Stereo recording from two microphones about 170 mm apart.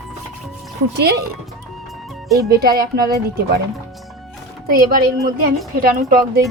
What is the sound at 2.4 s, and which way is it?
Speech, 70° right (ahead or behind).